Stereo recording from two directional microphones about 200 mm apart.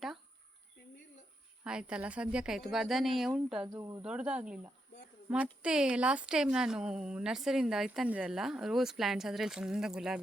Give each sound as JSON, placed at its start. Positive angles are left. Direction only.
{"t": 1.6, "sound": "a woman's voice", "side_deg": -5}
{"t": 3.7, "sound": "speech", "side_deg": -15}
{"t": 4.0, "sound": "a woman's voice", "side_deg": -5}